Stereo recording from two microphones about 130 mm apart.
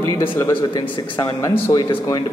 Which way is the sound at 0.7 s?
35° left (ahead or behind).